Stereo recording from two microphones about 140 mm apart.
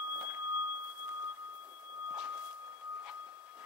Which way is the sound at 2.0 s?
10° right (ahead or behind).